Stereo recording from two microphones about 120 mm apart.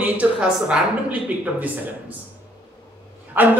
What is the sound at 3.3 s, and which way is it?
Speech, 15° right (ahead or behind).